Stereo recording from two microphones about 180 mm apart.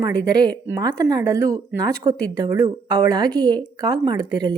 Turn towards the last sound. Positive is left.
turn(degrees=-25)  # may be behind; listen again after turning